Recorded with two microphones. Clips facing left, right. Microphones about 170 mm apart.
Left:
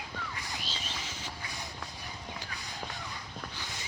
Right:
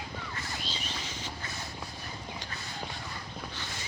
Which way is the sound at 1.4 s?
15° left (ahead or behind).